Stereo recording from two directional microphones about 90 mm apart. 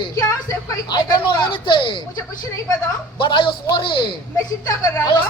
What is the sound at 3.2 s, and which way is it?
Speech, 65° left (ahead or behind).